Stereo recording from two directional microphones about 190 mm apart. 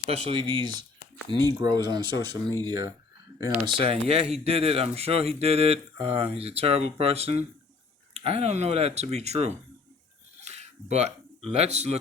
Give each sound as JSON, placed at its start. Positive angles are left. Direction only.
{"t": 0.0, "sound": "speech", "side_deg": -30}
{"t": 3.6, "sound": "speech", "side_deg": -30}
{"t": 10.4, "sound": "a sound", "side_deg": -35}
{"t": 11.4, "sound": "speech", "side_deg": -35}